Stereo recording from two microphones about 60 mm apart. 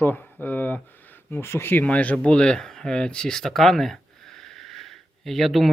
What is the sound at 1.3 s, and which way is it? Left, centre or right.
Speech, left.